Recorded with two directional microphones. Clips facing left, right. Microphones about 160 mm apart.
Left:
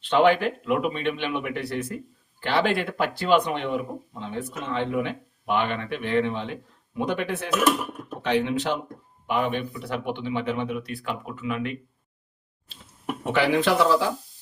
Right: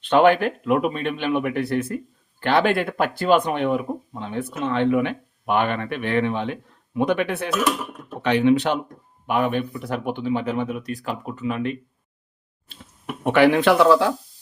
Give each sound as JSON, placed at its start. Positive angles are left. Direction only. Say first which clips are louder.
{"t": 0.1, "sound": "speech", "louder": "right 3 dB", "side_deg": -55}
{"t": 9.2, "sound": "speech", "louder": "right 4 dB", "side_deg": -55}
{"t": 13.2, "sound": "speech", "louder": "right 6 dB", "side_deg": -60}